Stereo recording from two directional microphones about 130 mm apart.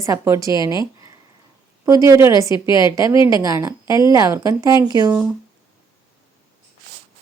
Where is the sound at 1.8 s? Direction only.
25° right (ahead or behind).